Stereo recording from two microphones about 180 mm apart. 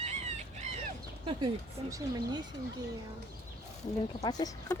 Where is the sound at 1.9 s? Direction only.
20° right (ahead or behind).